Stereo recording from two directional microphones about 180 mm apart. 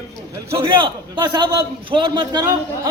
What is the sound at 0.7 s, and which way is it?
A man's voice, 25° right (ahead or behind).